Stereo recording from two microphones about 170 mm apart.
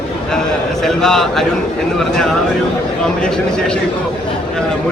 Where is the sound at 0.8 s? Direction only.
Centre (ahead or behind).